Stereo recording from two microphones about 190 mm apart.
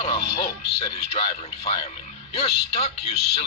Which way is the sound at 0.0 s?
30° left (ahead or behind).